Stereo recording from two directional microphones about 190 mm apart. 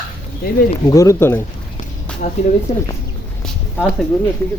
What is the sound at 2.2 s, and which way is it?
Speech, 45° left (ahead or behind).